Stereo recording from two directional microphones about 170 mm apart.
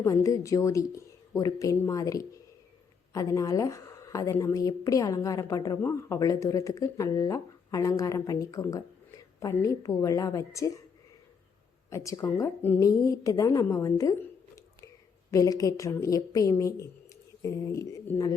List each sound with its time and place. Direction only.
0.0 s speech: 20° left (ahead or behind)
11.9 s a woman's voice: 20° left (ahead or behind)